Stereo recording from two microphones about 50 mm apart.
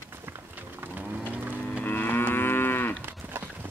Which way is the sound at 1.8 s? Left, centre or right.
Left.